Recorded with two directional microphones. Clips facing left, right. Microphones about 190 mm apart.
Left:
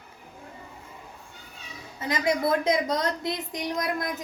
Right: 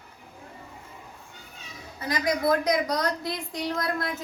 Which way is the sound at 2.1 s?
25° left (ahead or behind).